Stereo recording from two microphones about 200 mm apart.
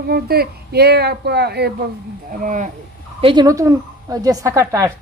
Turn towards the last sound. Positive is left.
turn(degrees=-15)  # may be behind; listen again after turning